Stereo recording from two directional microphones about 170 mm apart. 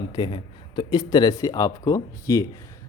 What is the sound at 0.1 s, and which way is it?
A man's voice, 25° left (ahead or behind).